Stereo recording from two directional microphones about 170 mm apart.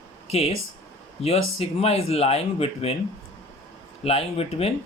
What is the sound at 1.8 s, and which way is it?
Speech, 35° left (ahead or behind).